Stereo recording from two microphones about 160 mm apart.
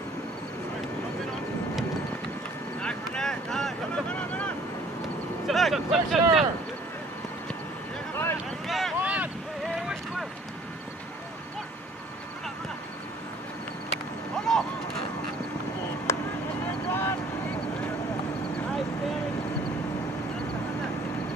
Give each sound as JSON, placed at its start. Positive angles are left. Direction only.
{"t": 2.8, "sound": "vehicle", "side_deg": 5}
{"t": 5.5, "sound": "speech", "side_deg": 0}
{"t": 8.5, "sound": "boat", "side_deg": 0}
{"t": 14.5, "sound": "a sound", "side_deg": 5}
{"t": 16.1, "sound": "a sound", "side_deg": 15}
{"t": 16.9, "sound": "vehicle", "side_deg": 15}